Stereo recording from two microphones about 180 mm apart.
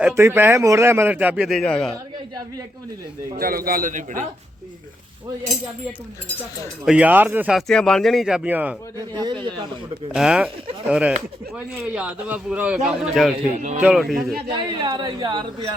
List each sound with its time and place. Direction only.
0.1 s a man's voice: 15° right (ahead or behind); by 1.9 s 5° left (ahead or behind)
3.3 s a man's voice: 55° right (ahead or behind)
6.8 s a man's voice: 5° right (ahead or behind)
7.7 s speech: 5° left (ahead or behind)
9.0 s speech: 25° right (ahead or behind)
10.1 s speech: centre (ahead or behind)
13.6 s speech: 40° right (ahead or behind)
13.8 s speech: centre (ahead or behind)
14.5 s speech: 25° right (ahead or behind)